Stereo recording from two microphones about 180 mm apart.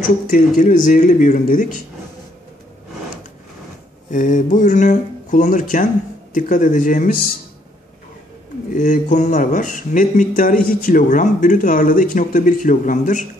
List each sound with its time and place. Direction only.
0.0 s speech: 45° left (ahead or behind)
4.1 s speech: 45° left (ahead or behind)
8.6 s speech: 45° left (ahead or behind)